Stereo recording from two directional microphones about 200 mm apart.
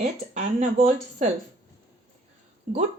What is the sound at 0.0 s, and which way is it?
Speech, 35° right (ahead or behind).